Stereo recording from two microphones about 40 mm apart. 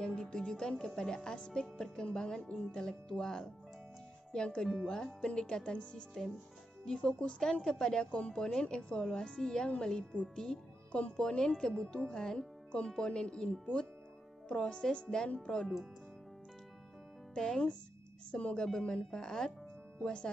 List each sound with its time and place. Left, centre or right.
0.0 s music: centre
4.3 s speech: centre
9.0 s music: left
9.8 s speech: left
10.3 s music: centre
10.9 s speech: left
11.2 s music: centre
12.9 s speech: left
17.3 s music: centre
18.3 s a woman's voice: left
19.1 s music: centre